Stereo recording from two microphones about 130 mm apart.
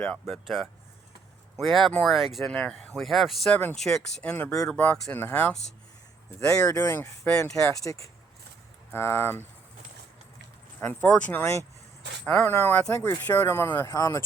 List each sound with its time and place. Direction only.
0.3 s speech: centre (ahead or behind)
6.4 s speech: 30° left (ahead or behind)
7.3 s speech: 10° left (ahead or behind)
7.9 s speech: 25° left (ahead or behind)
10.8 s speech: 15° left (ahead or behind)